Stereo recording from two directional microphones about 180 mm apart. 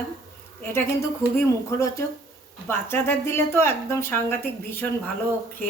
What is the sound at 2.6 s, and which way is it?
A woman's voice, 15° left (ahead or behind).